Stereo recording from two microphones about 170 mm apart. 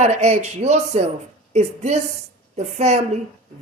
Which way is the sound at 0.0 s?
40° right (ahead or behind).